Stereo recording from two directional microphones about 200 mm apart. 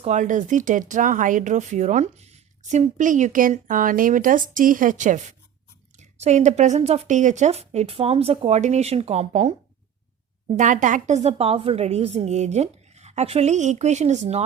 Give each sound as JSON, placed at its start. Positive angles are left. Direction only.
{"t": 0.0, "sound": "speech", "side_deg": -35}
{"t": 10.6, "sound": "speech", "side_deg": -40}